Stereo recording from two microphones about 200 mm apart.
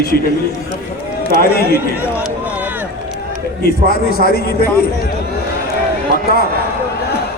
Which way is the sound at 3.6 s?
50° left (ahead or behind).